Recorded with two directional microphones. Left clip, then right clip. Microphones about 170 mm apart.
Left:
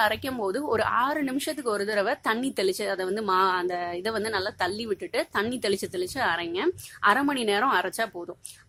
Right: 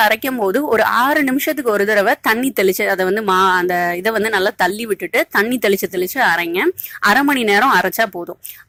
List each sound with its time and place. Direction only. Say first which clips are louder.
0.0 s speech: right 10 dB; 35° right (ahead or behind)